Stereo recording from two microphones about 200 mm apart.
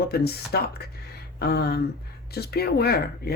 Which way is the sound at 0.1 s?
50° left (ahead or behind).